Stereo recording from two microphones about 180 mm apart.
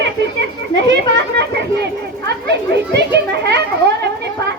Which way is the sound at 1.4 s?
70° right (ahead or behind).